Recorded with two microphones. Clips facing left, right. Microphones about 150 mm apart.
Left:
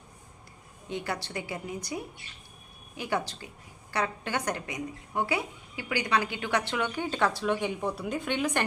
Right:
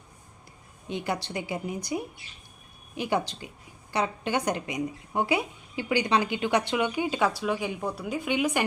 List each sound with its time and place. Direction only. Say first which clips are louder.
0.9 s a woman's voice: right 3 dB; 20° right (ahead or behind)